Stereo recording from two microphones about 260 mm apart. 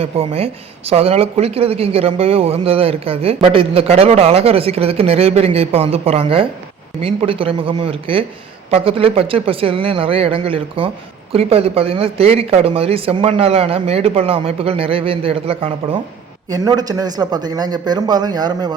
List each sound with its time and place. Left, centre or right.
0.0 s speech: right